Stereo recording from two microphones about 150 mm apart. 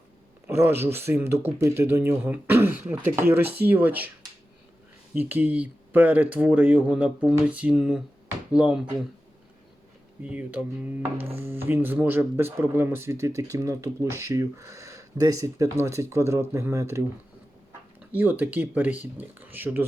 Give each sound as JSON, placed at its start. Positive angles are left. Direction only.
{"t": 0.4, "sound": "a sound", "side_deg": -15}
{"t": 0.8, "sound": "speech", "side_deg": -15}
{"t": 5.1, "sound": "speech", "side_deg": -10}
{"t": 10.2, "sound": "speech", "side_deg": -10}
{"t": 18.1, "sound": "speech", "side_deg": -10}